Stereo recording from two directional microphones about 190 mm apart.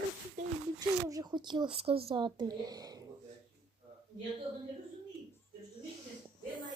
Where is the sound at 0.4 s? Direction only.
40° right (ahead or behind).